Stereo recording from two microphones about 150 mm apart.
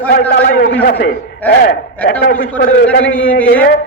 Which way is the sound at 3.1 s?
75° left (ahead or behind).